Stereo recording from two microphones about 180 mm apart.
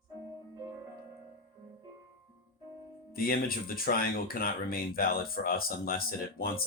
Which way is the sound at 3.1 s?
55° left (ahead or behind).